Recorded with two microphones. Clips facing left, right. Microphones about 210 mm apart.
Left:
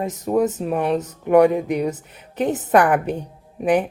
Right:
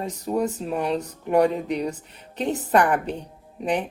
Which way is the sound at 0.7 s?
55° left (ahead or behind).